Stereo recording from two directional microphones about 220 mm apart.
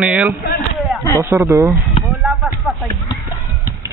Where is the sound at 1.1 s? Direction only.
10° right (ahead or behind).